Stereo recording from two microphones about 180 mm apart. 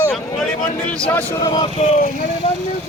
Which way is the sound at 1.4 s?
20° left (ahead or behind).